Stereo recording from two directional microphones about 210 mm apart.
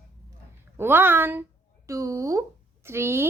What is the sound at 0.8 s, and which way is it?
A woman's voice, 10° right (ahead or behind).